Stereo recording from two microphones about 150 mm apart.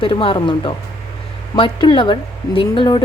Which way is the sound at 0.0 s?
35° left (ahead or behind).